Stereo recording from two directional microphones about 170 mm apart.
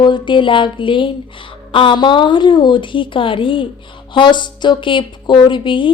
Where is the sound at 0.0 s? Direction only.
30° left (ahead or behind).